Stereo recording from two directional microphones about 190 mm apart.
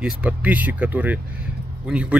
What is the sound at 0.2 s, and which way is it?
Speech, 5° right (ahead or behind).